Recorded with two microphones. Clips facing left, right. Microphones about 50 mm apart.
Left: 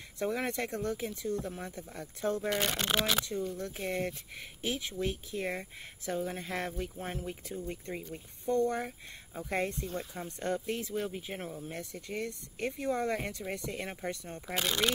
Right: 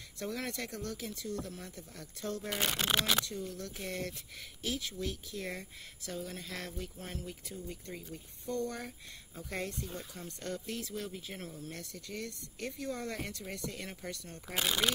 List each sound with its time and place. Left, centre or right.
0.2 s speech: left
2.5 s speech: centre
3.5 s speech: left
14.5 s speech: centre